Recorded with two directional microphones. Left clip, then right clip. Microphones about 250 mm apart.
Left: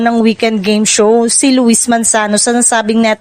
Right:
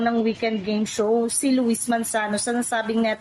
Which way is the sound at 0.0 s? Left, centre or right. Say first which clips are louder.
Left 11 dB; left.